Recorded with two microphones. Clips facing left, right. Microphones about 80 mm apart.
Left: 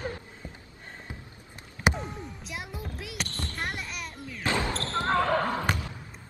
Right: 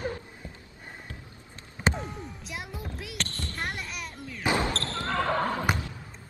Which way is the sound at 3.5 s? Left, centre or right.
Centre.